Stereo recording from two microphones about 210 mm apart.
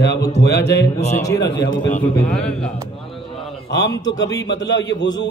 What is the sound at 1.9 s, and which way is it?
Speech, 5° left (ahead or behind).